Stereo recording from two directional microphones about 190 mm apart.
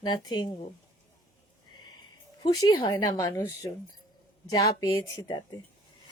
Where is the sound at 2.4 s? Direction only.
25° left (ahead or behind).